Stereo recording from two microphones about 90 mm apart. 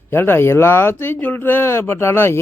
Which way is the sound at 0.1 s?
25° left (ahead or behind).